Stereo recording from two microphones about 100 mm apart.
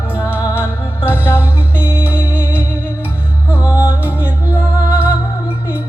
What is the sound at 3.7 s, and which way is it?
Music, 25° left (ahead or behind).